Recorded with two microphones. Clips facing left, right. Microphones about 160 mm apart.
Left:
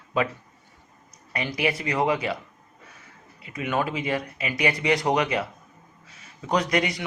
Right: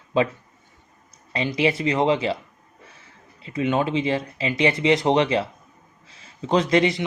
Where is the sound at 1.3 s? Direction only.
25° right (ahead or behind).